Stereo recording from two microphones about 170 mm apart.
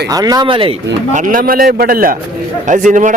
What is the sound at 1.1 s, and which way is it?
A man's voice, 50° right (ahead or behind).